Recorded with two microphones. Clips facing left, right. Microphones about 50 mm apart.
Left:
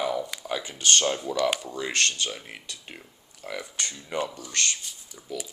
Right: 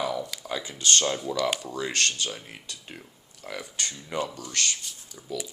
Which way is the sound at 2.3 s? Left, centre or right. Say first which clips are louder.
Left 1 dB; centre.